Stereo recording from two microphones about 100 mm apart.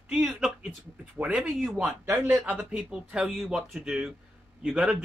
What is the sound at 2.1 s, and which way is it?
Speech, 15° right (ahead or behind).